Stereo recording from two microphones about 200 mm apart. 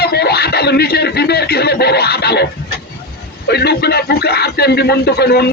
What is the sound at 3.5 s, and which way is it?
Speech, 55° left (ahead or behind).